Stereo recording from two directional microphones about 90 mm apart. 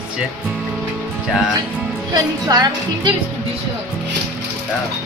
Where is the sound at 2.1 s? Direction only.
45° right (ahead or behind).